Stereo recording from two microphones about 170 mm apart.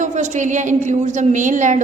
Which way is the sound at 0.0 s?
45° right (ahead or behind).